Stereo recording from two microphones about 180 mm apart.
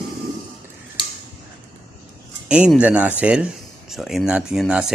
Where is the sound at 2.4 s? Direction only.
5° right (ahead or behind).